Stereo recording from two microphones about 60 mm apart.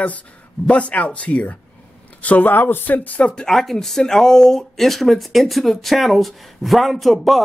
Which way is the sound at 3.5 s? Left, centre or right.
Centre.